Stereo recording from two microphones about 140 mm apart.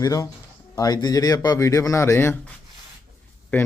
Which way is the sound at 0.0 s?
25° left (ahead or behind).